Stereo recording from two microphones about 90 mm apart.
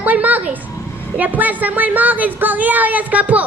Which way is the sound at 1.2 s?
20° right (ahead or behind).